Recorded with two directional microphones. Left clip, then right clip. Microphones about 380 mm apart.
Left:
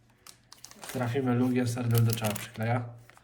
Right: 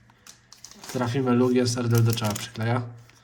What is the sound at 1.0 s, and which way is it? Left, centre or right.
Speech, centre.